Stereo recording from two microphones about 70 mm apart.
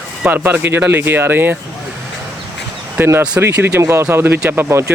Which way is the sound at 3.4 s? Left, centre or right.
Right.